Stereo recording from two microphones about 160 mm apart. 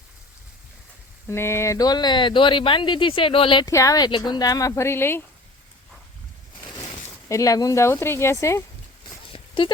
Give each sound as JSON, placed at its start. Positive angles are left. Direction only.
{"t": 1.3, "sound": "speech", "side_deg": 15}
{"t": 3.7, "sound": "speech", "side_deg": 20}
{"t": 7.3, "sound": "speech", "side_deg": 20}
{"t": 9.3, "sound": "a sound", "side_deg": 30}